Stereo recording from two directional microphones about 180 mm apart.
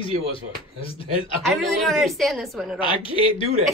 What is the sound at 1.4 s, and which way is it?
A woman's voice, centre (ahead or behind).